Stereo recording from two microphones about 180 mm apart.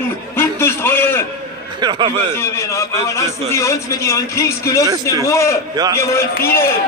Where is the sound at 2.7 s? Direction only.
15° left (ahead or behind).